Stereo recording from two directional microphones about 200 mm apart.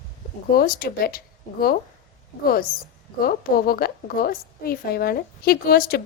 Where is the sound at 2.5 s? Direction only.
45° left (ahead or behind).